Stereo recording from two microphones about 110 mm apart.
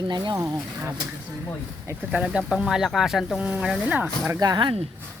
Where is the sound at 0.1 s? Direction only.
45° right (ahead or behind).